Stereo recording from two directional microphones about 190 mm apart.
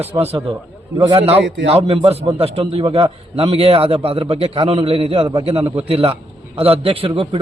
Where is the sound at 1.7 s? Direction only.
30° right (ahead or behind).